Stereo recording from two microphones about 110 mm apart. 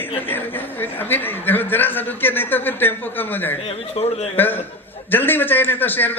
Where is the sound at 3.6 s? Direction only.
65° left (ahead or behind).